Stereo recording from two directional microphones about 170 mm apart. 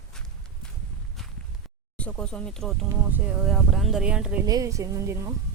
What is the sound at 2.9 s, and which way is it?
Speech, 10° right (ahead or behind).